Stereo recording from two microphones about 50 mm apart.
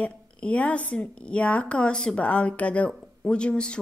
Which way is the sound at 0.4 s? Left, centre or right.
Left.